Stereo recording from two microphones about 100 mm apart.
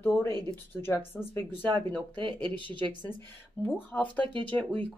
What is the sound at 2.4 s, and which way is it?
Speech, 55° right (ahead or behind).